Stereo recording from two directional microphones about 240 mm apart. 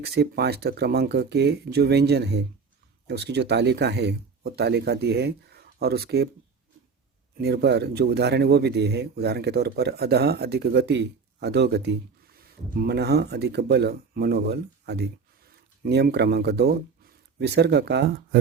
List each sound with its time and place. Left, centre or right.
0.0 s a man's voice: right
7.3 s a man's voice: right